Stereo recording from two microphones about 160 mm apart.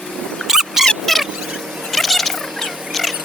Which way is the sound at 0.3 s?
Centre (ahead or behind).